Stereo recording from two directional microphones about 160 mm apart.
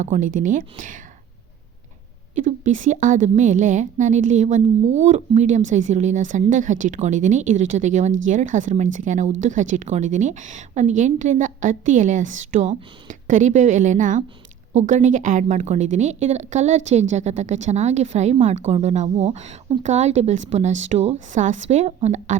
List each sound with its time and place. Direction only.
0.0 s speech: 55° right (ahead or behind)
2.3 s speech: 50° right (ahead or behind)